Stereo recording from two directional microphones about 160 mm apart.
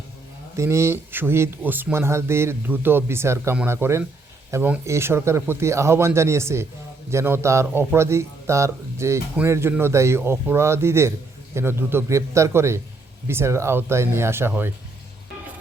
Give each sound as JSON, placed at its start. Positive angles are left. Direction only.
{"t": 0.5, "sound": "a man's voice", "side_deg": -15}